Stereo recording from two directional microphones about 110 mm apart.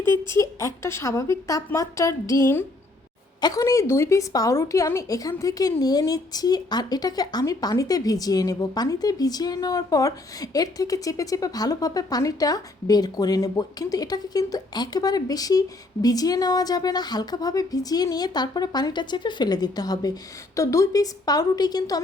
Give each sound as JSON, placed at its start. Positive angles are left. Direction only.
{"t": 0.1, "sound": "speech", "side_deg": 25}
{"t": 3.4, "sound": "speech", "side_deg": 30}